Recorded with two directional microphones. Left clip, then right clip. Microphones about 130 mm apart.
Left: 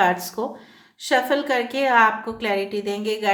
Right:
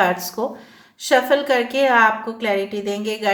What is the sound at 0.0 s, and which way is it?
Speech, 10° left (ahead or behind).